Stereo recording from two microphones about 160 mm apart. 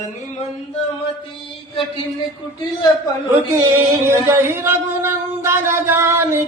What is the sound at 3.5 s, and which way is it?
Singing, 15° right (ahead or behind).